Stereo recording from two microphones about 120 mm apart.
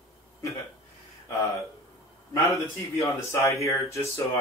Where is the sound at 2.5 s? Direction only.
25° left (ahead or behind).